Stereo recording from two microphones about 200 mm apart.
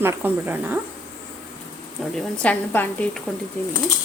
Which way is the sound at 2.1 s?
5° left (ahead or behind).